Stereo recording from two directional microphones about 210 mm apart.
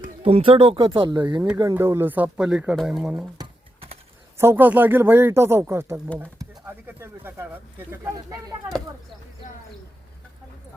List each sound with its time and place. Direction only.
0.0 s speech: 30° right (ahead or behind); by 3.2 s 5° right (ahead or behind)
4.4 s speech: 10° right (ahead or behind)